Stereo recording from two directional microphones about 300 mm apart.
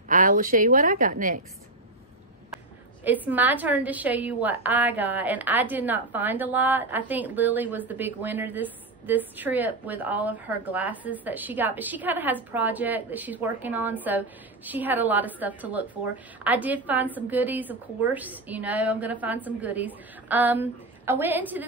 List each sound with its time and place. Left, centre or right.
0.1 s a woman's voice: right
3.0 s a woman's voice: centre